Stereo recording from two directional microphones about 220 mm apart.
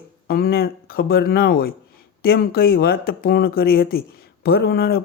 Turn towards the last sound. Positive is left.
turn(degrees=45)  # may be behind; listen again after turning